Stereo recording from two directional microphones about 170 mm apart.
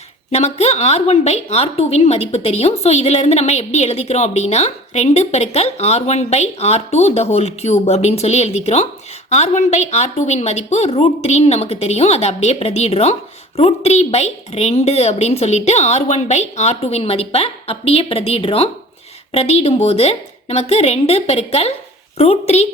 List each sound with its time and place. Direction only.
0.3 s a woman's voice: 40° left (ahead or behind)